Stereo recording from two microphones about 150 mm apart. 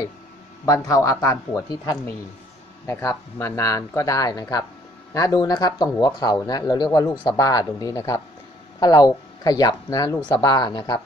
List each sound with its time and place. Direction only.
0.7 s speech: 20° left (ahead or behind)